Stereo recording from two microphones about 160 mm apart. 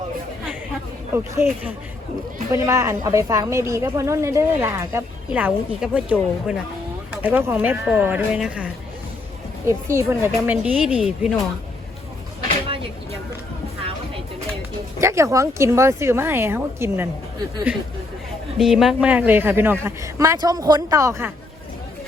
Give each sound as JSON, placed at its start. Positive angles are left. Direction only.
{"t": 1.1, "sound": "a woman's voice", "side_deg": -15}
{"t": 12.6, "sound": "vehicle", "side_deg": -35}
{"t": 15.0, "sound": "a woman's voice", "side_deg": -20}